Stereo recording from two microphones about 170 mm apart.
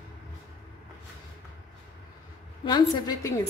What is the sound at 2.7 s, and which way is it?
Speech, 25° left (ahead or behind).